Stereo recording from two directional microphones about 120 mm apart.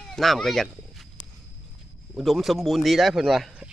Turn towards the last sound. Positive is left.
turn(degrees=-5)  # may be behind; listen again after turning